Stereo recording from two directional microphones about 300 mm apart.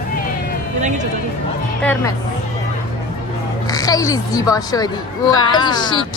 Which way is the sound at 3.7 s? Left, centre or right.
Centre.